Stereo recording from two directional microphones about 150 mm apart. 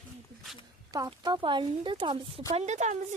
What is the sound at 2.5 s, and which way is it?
Speech, 50° right (ahead or behind).